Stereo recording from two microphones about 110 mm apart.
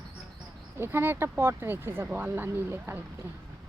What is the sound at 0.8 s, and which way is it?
Speech, 20° right (ahead or behind).